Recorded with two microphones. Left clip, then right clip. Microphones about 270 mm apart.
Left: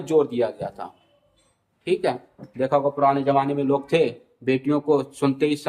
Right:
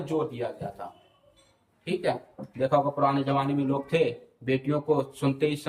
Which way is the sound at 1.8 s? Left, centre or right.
Centre.